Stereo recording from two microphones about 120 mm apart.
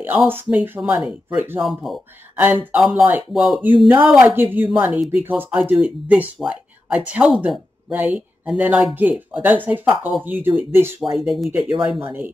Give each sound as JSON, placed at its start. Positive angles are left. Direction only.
{"t": 0.0, "sound": "speech", "side_deg": -15}
{"t": 1.6, "sound": "speech", "side_deg": 0}
{"t": 2.3, "sound": "speech", "side_deg": -15}
{"t": 2.8, "sound": "speech", "side_deg": 0}
{"t": 11.0, "sound": "speech", "side_deg": 0}
{"t": 12.0, "sound": "speech", "side_deg": -15}